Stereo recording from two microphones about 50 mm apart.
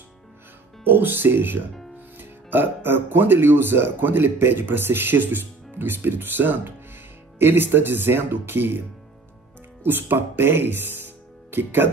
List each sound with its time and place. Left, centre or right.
0.8 s speech: right
9.8 s speech: right